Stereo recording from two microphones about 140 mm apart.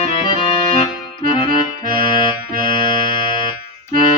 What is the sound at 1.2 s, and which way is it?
Accordion, 35° left (ahead or behind).